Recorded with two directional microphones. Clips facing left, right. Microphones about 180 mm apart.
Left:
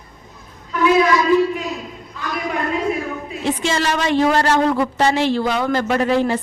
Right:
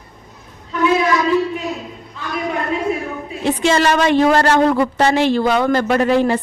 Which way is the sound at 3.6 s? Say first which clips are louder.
Right 7 dB; 60° right (ahead or behind).